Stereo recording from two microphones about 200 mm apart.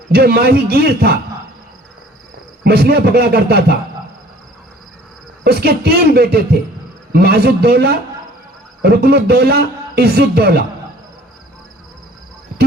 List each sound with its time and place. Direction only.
0.1 s a man's voice: 50° right (ahead or behind)
2.6 s a man's voice: 50° right (ahead or behind)
5.4 s a man's voice: 50° right (ahead or behind)